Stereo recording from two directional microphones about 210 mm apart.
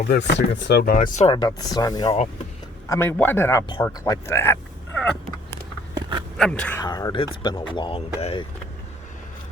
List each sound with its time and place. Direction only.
0.1 s speech: 55° left (ahead or behind); by 1.3 s 35° left (ahead or behind)
1.3 s speech: 20° left (ahead or behind)
5.9 s a sound: 20° right (ahead or behind)
6.3 s speech: 5° left (ahead or behind)
6.8 s speech: 20° left (ahead or behind)